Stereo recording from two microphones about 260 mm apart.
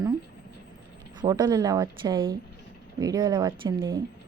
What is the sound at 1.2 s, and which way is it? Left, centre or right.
A woman's voice, centre.